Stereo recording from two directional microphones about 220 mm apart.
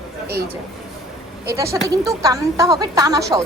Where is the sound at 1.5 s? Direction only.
15° right (ahead or behind).